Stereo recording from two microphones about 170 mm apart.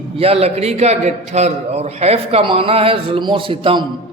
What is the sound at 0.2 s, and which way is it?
A man's voice, 35° right (ahead or behind).